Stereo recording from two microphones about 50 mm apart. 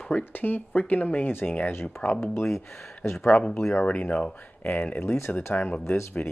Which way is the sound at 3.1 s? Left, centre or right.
Left.